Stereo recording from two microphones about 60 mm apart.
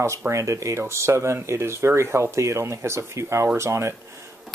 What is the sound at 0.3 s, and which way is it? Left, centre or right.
Speech, right.